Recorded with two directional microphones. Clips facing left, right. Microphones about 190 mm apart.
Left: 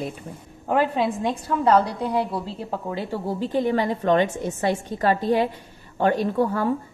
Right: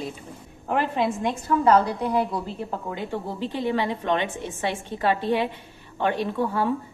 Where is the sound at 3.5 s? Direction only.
45° left (ahead or behind).